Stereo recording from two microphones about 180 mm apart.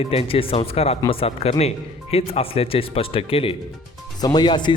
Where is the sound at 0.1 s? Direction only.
30° left (ahead or behind).